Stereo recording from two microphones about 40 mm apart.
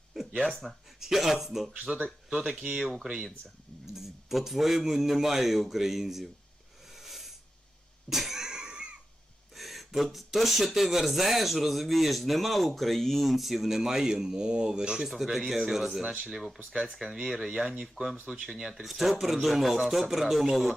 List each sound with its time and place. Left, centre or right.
0.1 s a sound: centre
0.6 s speech: centre
2.5 s speech: right
2.7 s speech: centre
6.9 s a sound: centre
8.4 s a sound: centre
9.6 s speech: centre; by 15.0 s right
15.0 s speech: centre
17.0 s speech: right
17.5 s speech: centre
18.7 s speech: centre